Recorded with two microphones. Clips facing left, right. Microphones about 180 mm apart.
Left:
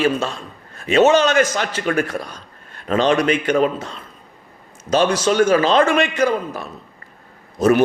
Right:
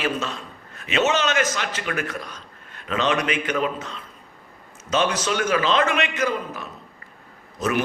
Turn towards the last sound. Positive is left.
turn(degrees=35)  # may be behind; listen again after turning